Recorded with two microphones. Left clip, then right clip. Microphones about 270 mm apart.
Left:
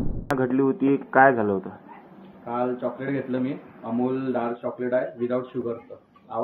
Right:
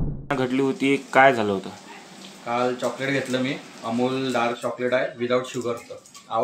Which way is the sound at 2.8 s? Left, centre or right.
Centre.